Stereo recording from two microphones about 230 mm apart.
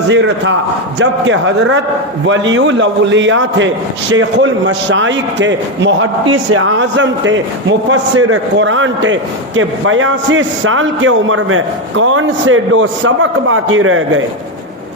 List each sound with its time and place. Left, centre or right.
0.1 s a man's voice: right